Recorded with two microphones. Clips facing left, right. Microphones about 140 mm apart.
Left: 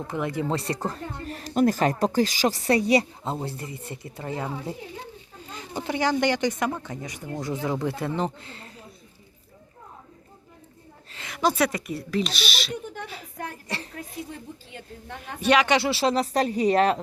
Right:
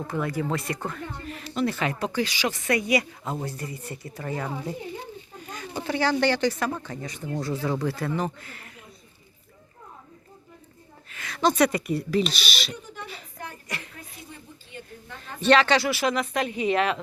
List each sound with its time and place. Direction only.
0.1 s speech: 20° left (ahead or behind)
11.1 s a sound: 25° left (ahead or behind)
11.3 s speech: 5° left (ahead or behind)
13.7 s music: 30° left (ahead or behind)
14.7 s a woman's voice: 80° left
15.4 s speech: 10° left (ahead or behind); by 17.0 s 40° left (ahead or behind)